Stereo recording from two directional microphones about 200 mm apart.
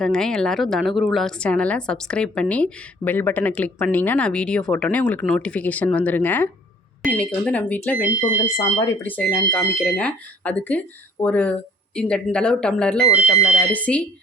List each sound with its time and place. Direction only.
0.0 s a woman's voice: 5° left (ahead or behind)
8.7 s speech: 20° left (ahead or behind)
9.0 s a woman's voice: 5° left (ahead or behind)